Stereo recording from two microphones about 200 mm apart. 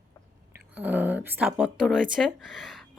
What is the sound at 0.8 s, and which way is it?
Speech, 10° right (ahead or behind).